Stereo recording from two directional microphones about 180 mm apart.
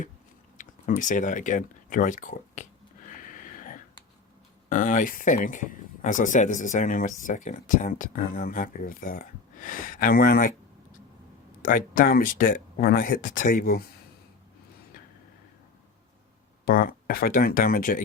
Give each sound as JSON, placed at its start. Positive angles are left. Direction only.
{"t": 0.6, "sound": "speech", "side_deg": 45}
{"t": 3.2, "sound": "a sound", "side_deg": 45}
{"t": 4.7, "sound": "speech", "side_deg": 45}
{"t": 11.6, "sound": "speech", "side_deg": 50}
{"t": 16.6, "sound": "speech", "side_deg": 55}